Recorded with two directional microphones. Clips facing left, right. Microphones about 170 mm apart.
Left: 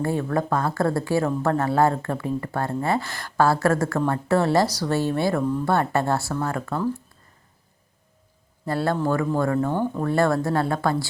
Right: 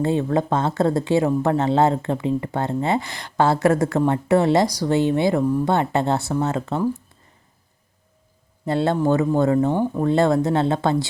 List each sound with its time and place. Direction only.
0.0 s speech: 20° right (ahead or behind)
8.6 s speech: 20° right (ahead or behind)